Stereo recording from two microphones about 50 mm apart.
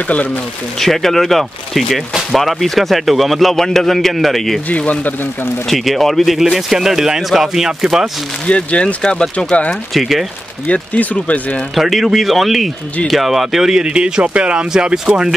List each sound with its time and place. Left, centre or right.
0.7 s a man's voice: centre
4.6 s speech: left
5.7 s a man's voice: centre
8.5 s speech: left
9.9 s a man's voice: centre
10.7 s speech: left
11.7 s a man's voice: centre